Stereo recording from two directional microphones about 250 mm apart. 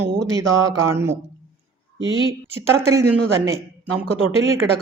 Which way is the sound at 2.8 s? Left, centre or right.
Centre.